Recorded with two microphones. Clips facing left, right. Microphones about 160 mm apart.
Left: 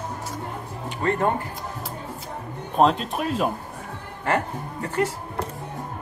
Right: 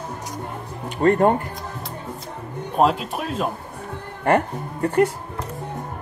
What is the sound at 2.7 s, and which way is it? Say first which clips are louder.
Speech: even; 5° right (ahead or behind).